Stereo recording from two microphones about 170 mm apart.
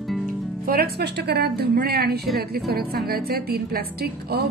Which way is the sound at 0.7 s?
65° right (ahead or behind).